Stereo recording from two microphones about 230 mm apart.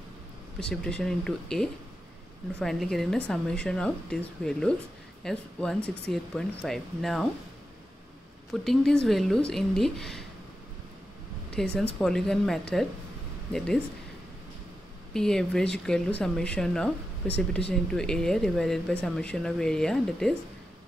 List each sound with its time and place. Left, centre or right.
0.6 s speech: centre
8.5 s speech: centre
11.5 s speech: centre
15.1 s speech: centre